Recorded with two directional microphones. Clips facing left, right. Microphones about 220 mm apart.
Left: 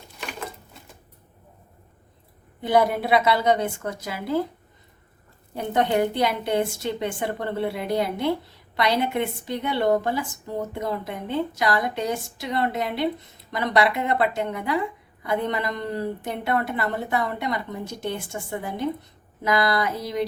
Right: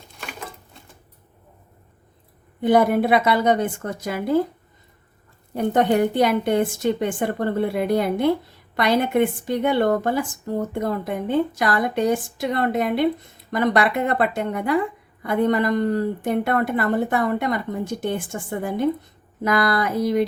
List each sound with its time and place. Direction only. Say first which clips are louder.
2.6 s a woman's voice: right 4 dB; 50° right (ahead or behind)
5.5 s a woman's voice: right 4 dB; 50° right (ahead or behind)